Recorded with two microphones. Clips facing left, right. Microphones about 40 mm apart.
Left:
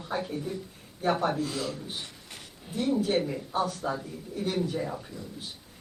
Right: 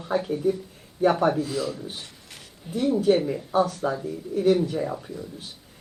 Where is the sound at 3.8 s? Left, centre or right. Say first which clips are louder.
Right 5 dB; right.